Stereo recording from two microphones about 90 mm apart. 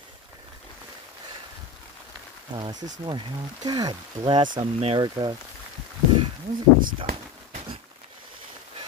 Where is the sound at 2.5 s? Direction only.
50° right (ahead or behind).